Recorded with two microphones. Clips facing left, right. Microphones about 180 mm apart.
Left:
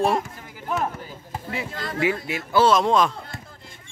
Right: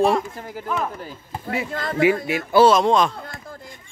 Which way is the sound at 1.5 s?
50° right (ahead or behind).